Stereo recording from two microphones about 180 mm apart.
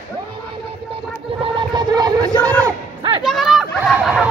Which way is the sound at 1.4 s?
25° right (ahead or behind).